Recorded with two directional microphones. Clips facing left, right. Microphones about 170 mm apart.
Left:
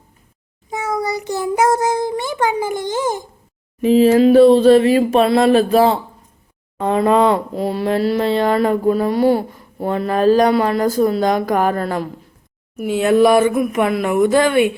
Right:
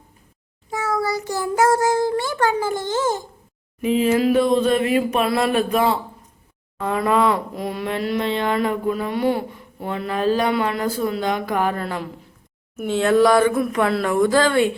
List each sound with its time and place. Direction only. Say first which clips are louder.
0.7 s a sound: left 1 dB; 20° left (ahead or behind)
3.8 s speech: left 7 dB; 35° left (ahead or behind)
12.9 s speech: left 3 dB; 15° left (ahead or behind)